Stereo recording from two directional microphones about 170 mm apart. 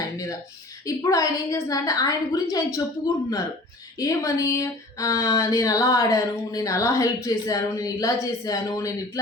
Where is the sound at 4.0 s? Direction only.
20° left (ahead or behind).